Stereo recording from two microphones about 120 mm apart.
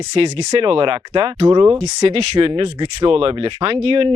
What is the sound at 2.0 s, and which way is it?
Speech, 55° right (ahead or behind).